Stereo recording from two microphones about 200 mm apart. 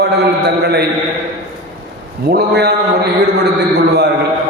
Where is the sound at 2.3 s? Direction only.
55° right (ahead or behind).